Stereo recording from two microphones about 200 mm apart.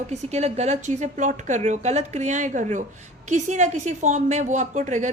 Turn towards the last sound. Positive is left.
turn(degrees=-35)  # may be behind; listen again after turning